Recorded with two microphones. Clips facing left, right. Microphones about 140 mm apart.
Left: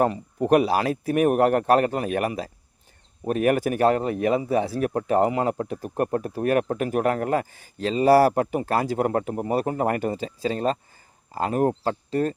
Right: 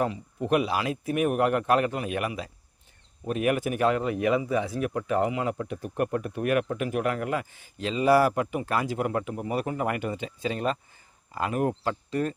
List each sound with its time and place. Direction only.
0.0 s speech: 50° left (ahead or behind)